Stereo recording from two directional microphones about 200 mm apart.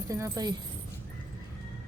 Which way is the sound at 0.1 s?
15° right (ahead or behind).